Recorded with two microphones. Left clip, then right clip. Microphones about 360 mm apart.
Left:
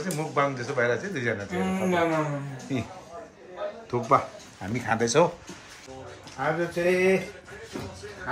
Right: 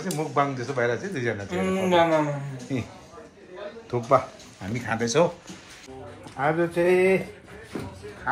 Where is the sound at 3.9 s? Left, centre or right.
Centre.